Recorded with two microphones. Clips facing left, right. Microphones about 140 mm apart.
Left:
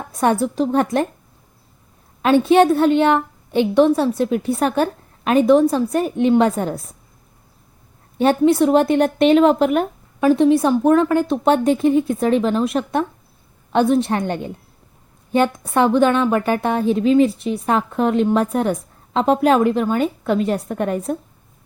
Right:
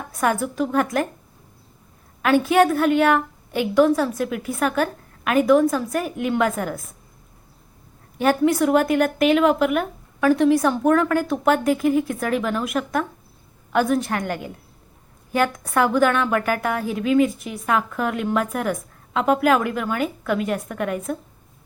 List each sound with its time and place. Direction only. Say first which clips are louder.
0.2 s a woman's voice: left 4 dB; 30° left (ahead or behind)
2.2 s a woman's voice: left 4 dB; 25° left (ahead or behind)
8.2 s a woman's voice: left 4 dB; 25° left (ahead or behind)